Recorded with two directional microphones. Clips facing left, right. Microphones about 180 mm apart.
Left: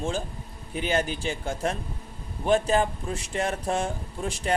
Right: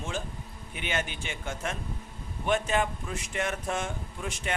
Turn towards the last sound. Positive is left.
turn(degrees=35)  # may be behind; listen again after turning